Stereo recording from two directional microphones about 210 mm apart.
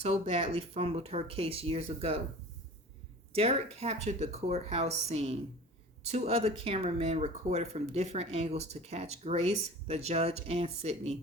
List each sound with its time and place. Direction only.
0.0 s speech: 30° right (ahead or behind)
3.3 s speech: 30° right (ahead or behind)